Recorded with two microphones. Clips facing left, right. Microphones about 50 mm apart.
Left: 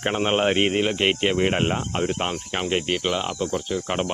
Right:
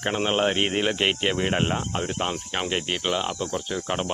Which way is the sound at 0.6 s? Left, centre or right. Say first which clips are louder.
Left 2 dB; centre.